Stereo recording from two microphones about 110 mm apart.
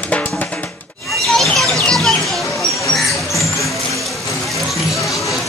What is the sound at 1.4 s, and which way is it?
Music, 5° left (ahead or behind).